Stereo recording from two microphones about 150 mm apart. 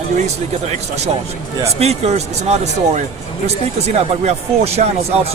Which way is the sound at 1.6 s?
45° right (ahead or behind).